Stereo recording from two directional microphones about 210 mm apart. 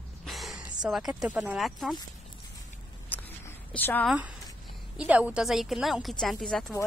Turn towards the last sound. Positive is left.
turn(degrees=0)  # may be behind; listen again after turning